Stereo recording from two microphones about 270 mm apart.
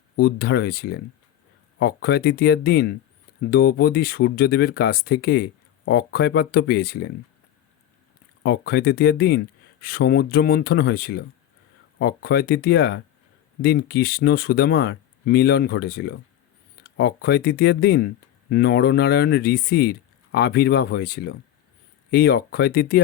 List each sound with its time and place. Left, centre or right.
0.2 s speech: left
8.4 s speech: left